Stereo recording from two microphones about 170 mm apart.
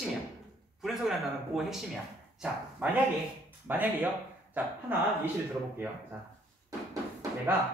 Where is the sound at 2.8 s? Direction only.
10° right (ahead or behind).